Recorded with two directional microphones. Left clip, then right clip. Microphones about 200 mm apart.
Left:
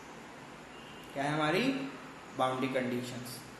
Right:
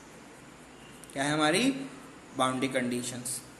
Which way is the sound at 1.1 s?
45° right (ahead or behind).